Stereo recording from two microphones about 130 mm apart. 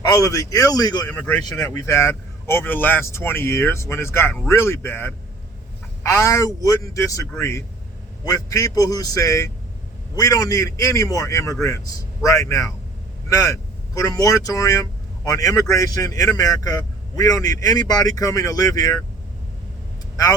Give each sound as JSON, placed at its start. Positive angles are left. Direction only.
{"t": 0.1, "sound": "speech", "side_deg": 25}
{"t": 1.0, "sound": "speech", "side_deg": 10}
{"t": 1.5, "sound": "speech", "side_deg": 25}